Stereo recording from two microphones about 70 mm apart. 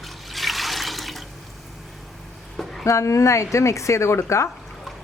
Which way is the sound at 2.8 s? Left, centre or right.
Left.